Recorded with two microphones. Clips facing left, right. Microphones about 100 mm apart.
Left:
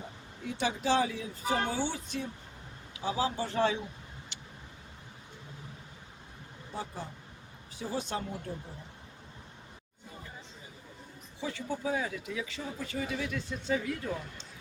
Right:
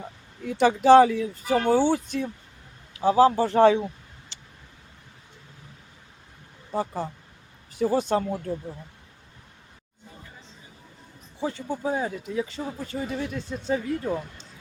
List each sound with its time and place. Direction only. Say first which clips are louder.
0.4 s speech: right 13 dB; 55° right (ahead or behind)
6.7 s speech: right 11 dB; 45° right (ahead or behind)
11.3 s speech: right 6 dB; 40° right (ahead or behind)